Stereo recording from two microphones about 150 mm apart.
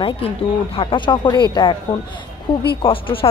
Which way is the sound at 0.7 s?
30° left (ahead or behind).